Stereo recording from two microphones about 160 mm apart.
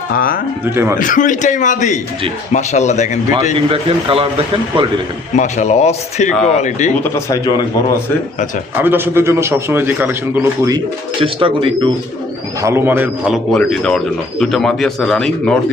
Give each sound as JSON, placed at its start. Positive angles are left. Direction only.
{"t": 0.6, "sound": "a man's voice", "side_deg": -15}
{"t": 0.9, "sound": "a man's voice", "side_deg": 55}
{"t": 3.7, "sound": "speech", "side_deg": -35}
{"t": 5.4, "sound": "a man's voice", "side_deg": 45}
{"t": 7.0, "sound": "speech", "side_deg": 20}
{"t": 8.8, "sound": "a man's voice", "side_deg": -15}
{"t": 11.2, "sound": "speech", "side_deg": -35}
{"t": 12.6, "sound": "a man's voice", "side_deg": -15}
{"t": 13.5, "sound": "speech", "side_deg": 5}